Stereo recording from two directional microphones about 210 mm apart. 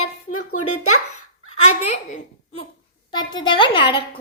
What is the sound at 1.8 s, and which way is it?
Speech, 30° left (ahead or behind).